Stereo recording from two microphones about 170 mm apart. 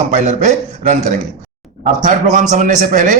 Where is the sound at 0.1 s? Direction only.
45° right (ahead or behind).